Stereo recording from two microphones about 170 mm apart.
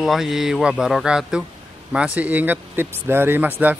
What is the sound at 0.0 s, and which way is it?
Speech, centre (ahead or behind).